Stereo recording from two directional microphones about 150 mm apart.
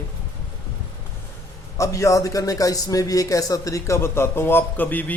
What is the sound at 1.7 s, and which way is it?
A man's voice, 20° left (ahead or behind).